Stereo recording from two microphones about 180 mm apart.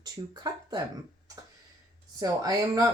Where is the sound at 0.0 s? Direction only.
25° right (ahead or behind).